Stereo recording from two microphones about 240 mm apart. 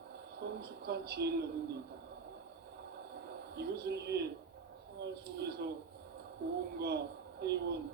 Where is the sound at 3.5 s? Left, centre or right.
Right.